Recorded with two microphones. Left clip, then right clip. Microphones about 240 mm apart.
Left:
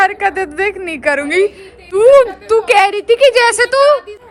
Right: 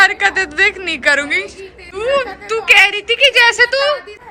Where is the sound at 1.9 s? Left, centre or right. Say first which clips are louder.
Left 10 dB; centre.